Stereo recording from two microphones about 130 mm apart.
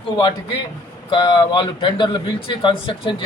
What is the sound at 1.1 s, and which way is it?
A man's voice, 35° left (ahead or behind).